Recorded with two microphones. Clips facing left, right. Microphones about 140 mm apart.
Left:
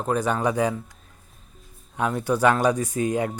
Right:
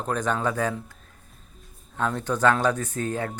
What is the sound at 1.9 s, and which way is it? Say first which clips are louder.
Speech: left 3 dB; 10° left (ahead or behind).